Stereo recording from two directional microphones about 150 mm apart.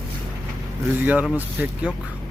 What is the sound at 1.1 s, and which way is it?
Speech, 10° right (ahead or behind).